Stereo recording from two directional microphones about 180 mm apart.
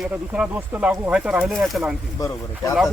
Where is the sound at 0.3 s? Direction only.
5° right (ahead or behind).